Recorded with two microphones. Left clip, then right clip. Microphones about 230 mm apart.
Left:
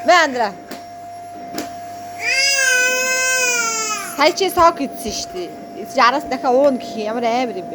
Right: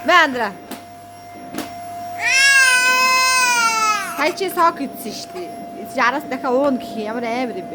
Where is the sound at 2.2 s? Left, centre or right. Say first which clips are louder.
Right 4 dB; centre.